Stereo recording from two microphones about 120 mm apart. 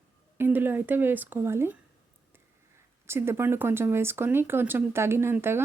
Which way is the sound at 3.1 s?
20° right (ahead or behind).